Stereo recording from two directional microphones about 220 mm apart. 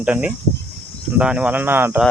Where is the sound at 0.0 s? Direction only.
5° right (ahead or behind).